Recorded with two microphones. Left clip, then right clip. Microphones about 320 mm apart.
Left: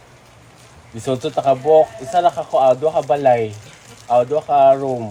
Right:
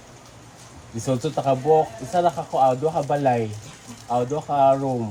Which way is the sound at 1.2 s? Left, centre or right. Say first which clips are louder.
Left 7 dB; left.